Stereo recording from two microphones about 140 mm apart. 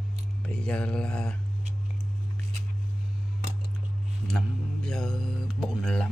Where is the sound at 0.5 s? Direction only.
5° left (ahead or behind).